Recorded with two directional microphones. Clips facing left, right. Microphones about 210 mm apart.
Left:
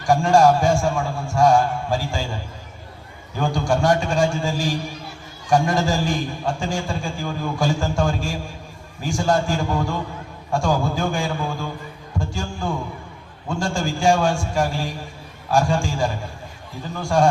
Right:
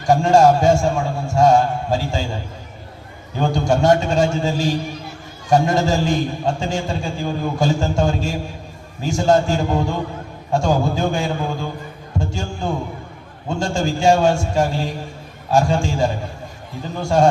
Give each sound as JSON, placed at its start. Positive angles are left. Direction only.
{"t": 0.0, "sound": "a man's voice", "side_deg": -25}
{"t": 3.3, "sound": "a man's voice", "side_deg": -25}